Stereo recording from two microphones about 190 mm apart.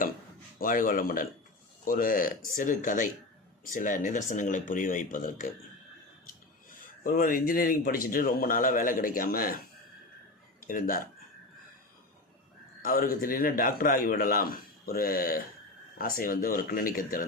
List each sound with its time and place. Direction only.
0.6 s a man's voice: 45° left (ahead or behind)
7.0 s a man's voice: 50° left (ahead or behind)
10.7 s a man's voice: 45° left (ahead or behind)
12.8 s a man's voice: 50° left (ahead or behind)